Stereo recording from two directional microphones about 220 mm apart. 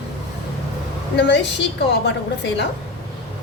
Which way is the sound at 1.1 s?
50° left (ahead or behind).